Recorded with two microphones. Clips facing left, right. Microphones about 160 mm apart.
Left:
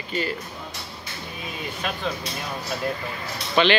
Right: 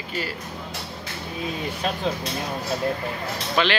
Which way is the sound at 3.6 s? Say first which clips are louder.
Left 3 dB; centre (ahead or behind).